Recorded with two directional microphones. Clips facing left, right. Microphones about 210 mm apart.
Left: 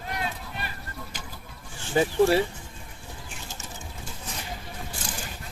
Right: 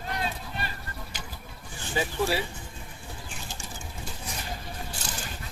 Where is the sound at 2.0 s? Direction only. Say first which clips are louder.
Left 7 dB; 45° left (ahead or behind).